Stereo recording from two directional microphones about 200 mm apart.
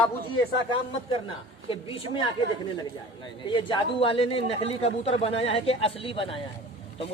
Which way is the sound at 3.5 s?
25° left (ahead or behind).